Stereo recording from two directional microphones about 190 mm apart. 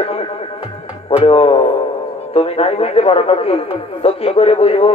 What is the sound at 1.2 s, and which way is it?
A man's voice, 30° left (ahead or behind).